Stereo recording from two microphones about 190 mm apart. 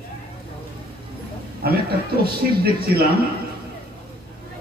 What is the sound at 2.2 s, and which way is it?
Speech, 55° right (ahead or behind).